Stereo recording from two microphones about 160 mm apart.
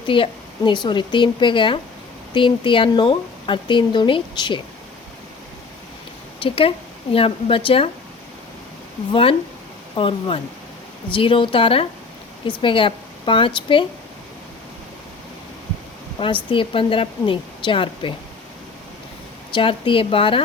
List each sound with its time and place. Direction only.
0.1 s a woman's voice: 30° left (ahead or behind)
6.4 s a woman's voice: 35° left (ahead or behind)
9.9 s a woman's voice: 35° left (ahead or behind)
16.1 s a woman's voice: 30° left (ahead or behind)
19.5 s a woman's voice: 35° left (ahead or behind)